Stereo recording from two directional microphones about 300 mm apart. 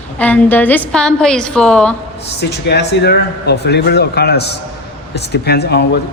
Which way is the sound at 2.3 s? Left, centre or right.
Left.